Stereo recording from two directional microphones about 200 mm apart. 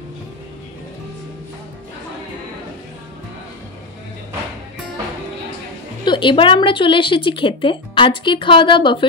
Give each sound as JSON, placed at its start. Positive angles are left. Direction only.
{"t": 6.0, "sound": "speech", "side_deg": 25}